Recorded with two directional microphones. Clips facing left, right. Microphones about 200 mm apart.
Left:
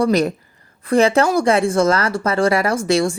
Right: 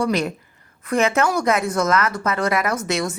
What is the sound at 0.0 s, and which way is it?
Speech, 40° left (ahead or behind).